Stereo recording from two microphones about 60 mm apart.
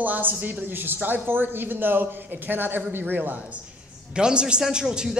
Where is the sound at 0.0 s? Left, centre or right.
Right.